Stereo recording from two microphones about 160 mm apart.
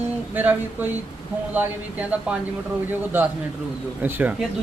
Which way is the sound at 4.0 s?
10° right (ahead or behind).